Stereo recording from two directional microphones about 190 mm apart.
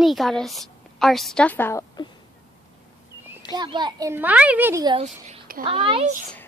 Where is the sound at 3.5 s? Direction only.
25° right (ahead or behind).